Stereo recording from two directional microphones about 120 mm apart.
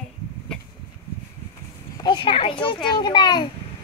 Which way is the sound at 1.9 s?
40° left (ahead or behind).